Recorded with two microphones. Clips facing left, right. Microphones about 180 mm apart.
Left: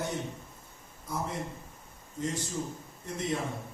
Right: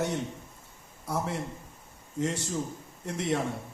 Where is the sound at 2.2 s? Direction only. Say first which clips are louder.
Right 3 dB; 75° right (ahead or behind).